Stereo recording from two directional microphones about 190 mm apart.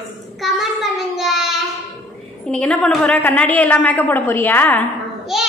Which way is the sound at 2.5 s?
5° left (ahead or behind).